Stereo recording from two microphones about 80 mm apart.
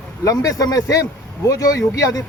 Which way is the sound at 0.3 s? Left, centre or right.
Left.